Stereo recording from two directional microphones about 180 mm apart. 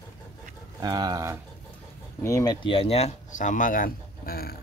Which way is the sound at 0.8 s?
20° right (ahead or behind).